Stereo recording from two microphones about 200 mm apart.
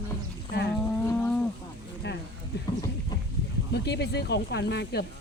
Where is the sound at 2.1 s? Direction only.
60° left (ahead or behind).